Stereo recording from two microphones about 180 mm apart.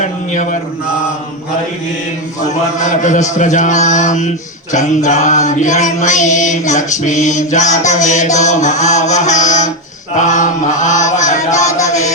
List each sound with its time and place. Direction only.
2.7 s mantra: 40° left (ahead or behind)
4.7 s a sound: 40° left (ahead or behind)
10.2 s mantra: 45° left (ahead or behind)